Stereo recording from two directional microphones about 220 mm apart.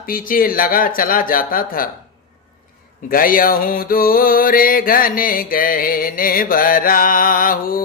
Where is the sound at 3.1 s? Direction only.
40° left (ahead or behind).